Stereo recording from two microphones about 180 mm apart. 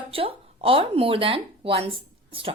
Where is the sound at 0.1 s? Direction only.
30° right (ahead or behind).